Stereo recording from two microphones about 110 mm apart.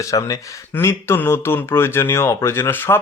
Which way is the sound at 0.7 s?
20° left (ahead or behind).